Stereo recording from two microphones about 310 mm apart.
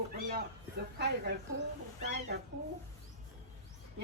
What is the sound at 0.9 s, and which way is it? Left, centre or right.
Speech, right.